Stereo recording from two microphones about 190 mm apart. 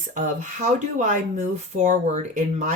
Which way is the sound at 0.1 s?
40° right (ahead or behind).